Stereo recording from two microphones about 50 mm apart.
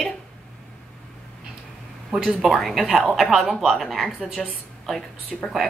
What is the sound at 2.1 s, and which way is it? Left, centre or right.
Speech, centre.